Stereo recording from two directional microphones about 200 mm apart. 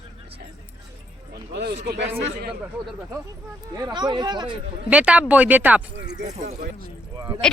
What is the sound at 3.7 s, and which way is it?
Speech, 20° right (ahead or behind).